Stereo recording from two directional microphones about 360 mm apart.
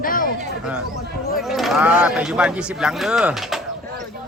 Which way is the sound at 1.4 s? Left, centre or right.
Centre.